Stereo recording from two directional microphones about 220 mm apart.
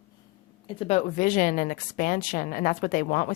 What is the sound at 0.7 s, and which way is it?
Speech, 25° left (ahead or behind).